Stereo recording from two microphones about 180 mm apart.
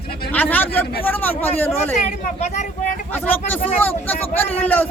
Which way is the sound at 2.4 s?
40° left (ahead or behind).